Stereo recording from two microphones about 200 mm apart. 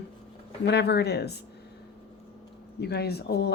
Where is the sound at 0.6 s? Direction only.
55° left (ahead or behind).